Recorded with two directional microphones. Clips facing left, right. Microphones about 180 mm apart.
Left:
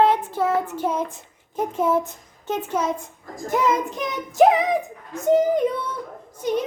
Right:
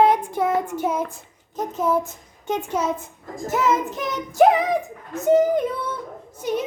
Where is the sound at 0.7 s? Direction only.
10° right (ahead or behind).